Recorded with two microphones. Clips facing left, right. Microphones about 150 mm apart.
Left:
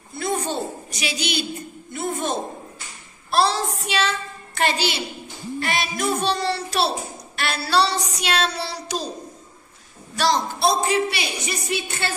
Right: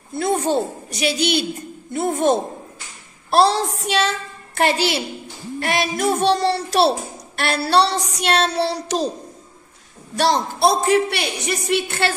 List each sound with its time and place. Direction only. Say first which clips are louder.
0.2 s a woman's voice: right 6 dB; 55° right (ahead or behind)
10.1 s a woman's voice: right 2 dB; 60° right (ahead or behind)